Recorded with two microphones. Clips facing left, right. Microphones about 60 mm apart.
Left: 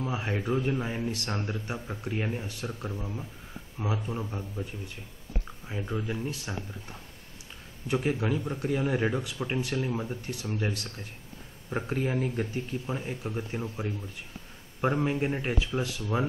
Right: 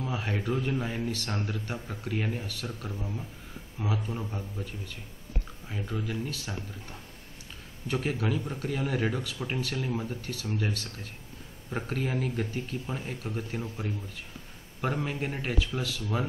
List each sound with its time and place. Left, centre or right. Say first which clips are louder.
0.0 s a sound: left 1 dB; centre
0.3 s speech: left 2 dB; centre
2.4 s a man's voice: left 1 dB; left
4.1 s speech: left 1 dB; centre
5.7 s speech: left 2 dB; centre
13.4 s a man's voice: left 1 dB; centre